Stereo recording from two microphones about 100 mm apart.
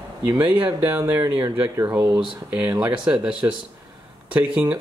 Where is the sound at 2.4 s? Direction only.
15° right (ahead or behind).